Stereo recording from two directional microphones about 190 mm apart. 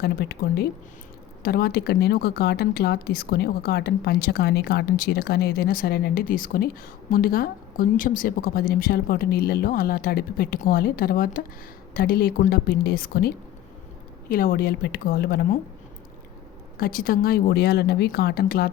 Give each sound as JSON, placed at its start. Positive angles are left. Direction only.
{"t": 0.0, "sound": "a woman's voice", "side_deg": 55}
{"t": 16.7, "sound": "a woman's voice", "side_deg": 50}